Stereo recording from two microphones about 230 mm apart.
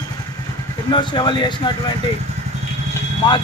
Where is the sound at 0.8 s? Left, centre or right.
Left.